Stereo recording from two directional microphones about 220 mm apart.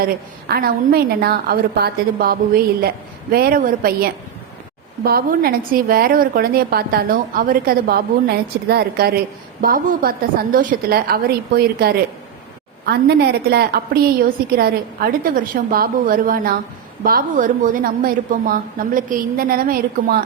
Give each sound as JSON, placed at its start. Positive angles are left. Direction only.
{"t": 0.0, "sound": "a woman's voice", "side_deg": -45}